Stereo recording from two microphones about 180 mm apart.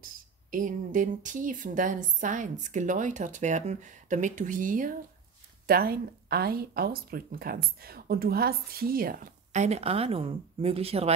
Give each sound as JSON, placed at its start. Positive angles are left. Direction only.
{"t": 0.0, "sound": "speech", "side_deg": -45}